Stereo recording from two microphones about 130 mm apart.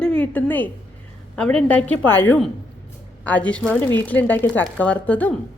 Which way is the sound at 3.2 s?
10° left (ahead or behind).